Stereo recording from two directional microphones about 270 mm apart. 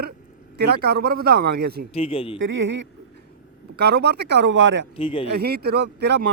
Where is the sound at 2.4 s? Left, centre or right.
Right.